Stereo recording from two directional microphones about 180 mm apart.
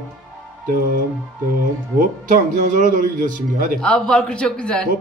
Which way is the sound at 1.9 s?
45° right (ahead or behind).